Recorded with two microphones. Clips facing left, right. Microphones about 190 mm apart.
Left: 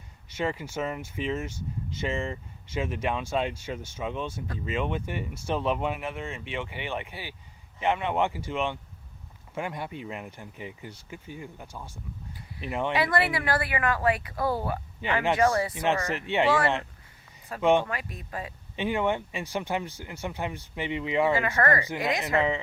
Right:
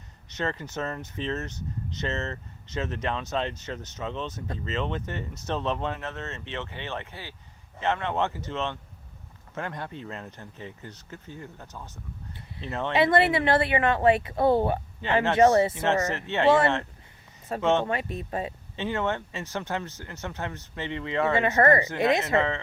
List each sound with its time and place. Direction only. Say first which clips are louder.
0.3 s speech: left 1 dB; 10° left (ahead or behind)
12.3 s a sound: left 1 dB; 25° right (ahead or behind)
12.9 s speech: right 6 dB; 25° right (ahead or behind)
15.0 s speech: right 2 dB; 15° left (ahead or behind)
15.4 s speech: right 9 dB; 25° right (ahead or behind)
16.0 s speech: even; 15° left (ahead or behind)
16.5 s speech: right 6 dB; 25° right (ahead or behind)
17.6 s speech: left 2 dB; 15° left (ahead or behind)
17.8 s speech: right 6 dB; 25° right (ahead or behind)
18.8 s speech: left 2 dB; 15° left (ahead or behind)
21.3 s speech: right 4 dB; 25° right (ahead or behind)
22.4 s speech: even; 15° left (ahead or behind)